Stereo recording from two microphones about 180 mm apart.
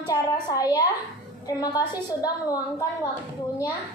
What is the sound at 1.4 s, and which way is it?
A woman's voice, 20° left (ahead or behind).